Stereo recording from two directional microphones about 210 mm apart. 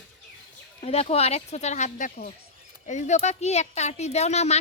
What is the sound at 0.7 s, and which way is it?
A woman's voice, 30° left (ahead or behind).